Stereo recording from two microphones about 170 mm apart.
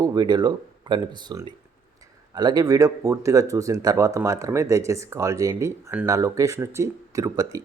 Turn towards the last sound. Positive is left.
turn(degrees=-20)  # may be behind; listen again after turning